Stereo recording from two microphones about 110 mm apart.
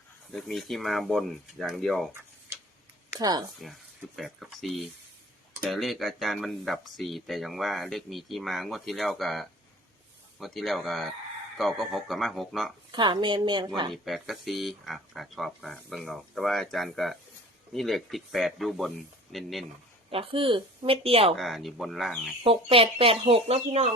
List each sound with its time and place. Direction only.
0.3 s speech: centre (ahead or behind)
3.2 s speech: 35° right (ahead or behind)
3.6 s speech: centre (ahead or behind)
12.9 s a woman's voice: 45° right (ahead or behind)
13.9 s speech: centre (ahead or behind)
20.1 s speech: 60° right (ahead or behind)
21.3 s speech: centre (ahead or behind)
22.4 s speech: 60° right (ahead or behind)